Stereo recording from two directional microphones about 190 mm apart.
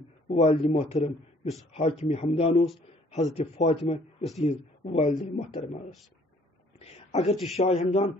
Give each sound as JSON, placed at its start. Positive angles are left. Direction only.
{"t": 0.3, "sound": "speech", "side_deg": 30}
{"t": 6.8, "sound": "a sound", "side_deg": 35}
{"t": 7.5, "sound": "speech", "side_deg": 35}